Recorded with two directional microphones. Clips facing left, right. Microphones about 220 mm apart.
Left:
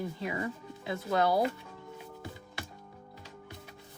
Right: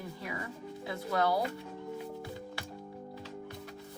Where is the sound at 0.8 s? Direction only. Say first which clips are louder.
Left 2 dB; 20° left (ahead or behind).